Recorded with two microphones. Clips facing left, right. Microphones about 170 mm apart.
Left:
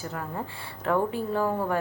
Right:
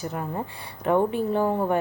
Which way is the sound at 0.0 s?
20° right (ahead or behind).